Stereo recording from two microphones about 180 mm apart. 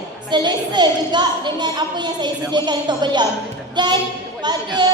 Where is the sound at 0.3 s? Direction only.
25° right (ahead or behind).